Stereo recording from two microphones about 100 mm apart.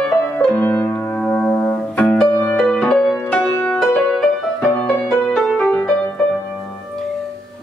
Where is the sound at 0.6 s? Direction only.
20° left (ahead or behind).